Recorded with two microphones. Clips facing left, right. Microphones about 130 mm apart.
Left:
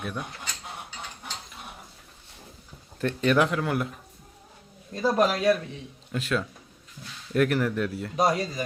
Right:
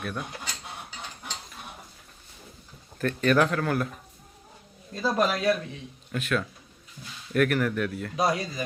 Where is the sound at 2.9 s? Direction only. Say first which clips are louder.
Even; 20° left (ahead or behind).